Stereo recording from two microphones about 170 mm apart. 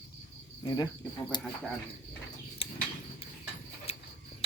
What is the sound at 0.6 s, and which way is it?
Speech, 20° left (ahead or behind).